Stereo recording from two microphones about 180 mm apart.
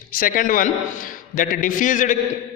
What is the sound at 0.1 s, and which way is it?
A man's voice, 50° left (ahead or behind).